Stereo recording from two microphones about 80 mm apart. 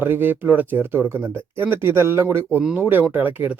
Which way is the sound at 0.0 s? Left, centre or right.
Right.